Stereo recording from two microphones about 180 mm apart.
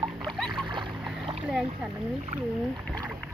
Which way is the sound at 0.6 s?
25° right (ahead or behind).